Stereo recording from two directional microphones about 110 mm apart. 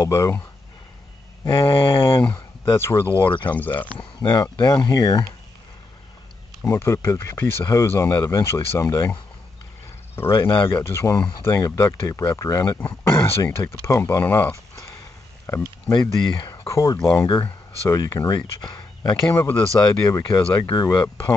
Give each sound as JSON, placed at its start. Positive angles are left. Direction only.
{"t": 0.0, "sound": "speech", "side_deg": 30}
{"t": 1.5, "sound": "speech", "side_deg": 50}
{"t": 2.0, "sound": "speech", "side_deg": 20}
{"t": 3.5, "sound": "speech", "side_deg": 15}
{"t": 4.6, "sound": "speech", "side_deg": 35}
{"t": 6.6, "sound": "speech", "side_deg": 25}
{"t": 10.1, "sound": "speech", "side_deg": 20}
{"t": 15.9, "sound": "speech", "side_deg": 45}
{"t": 16.4, "sound": "speech", "side_deg": 30}
{"t": 18.6, "sound": "a sound", "side_deg": 40}
{"t": 19.2, "sound": "speech", "side_deg": 25}
{"t": 20.2, "sound": "speech", "side_deg": 45}